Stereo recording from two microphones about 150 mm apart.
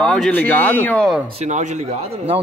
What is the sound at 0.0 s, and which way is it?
Speech, 5° left (ahead or behind).